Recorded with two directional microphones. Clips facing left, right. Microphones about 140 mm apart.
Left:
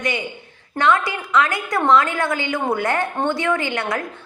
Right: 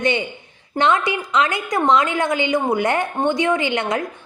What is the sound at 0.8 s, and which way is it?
A woman's voice, 20° right (ahead or behind).